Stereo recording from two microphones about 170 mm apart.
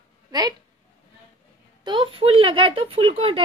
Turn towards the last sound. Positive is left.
turn(degrees=-35)  # may be behind; listen again after turning